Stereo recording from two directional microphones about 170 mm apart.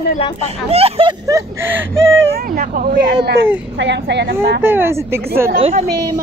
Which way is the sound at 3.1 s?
75° right (ahead or behind).